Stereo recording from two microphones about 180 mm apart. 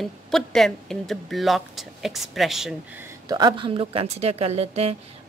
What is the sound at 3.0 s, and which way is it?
Speech, 20° right (ahead or behind).